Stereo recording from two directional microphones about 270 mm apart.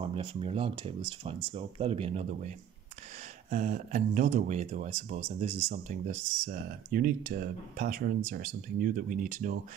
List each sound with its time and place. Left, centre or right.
0.0 s speech: centre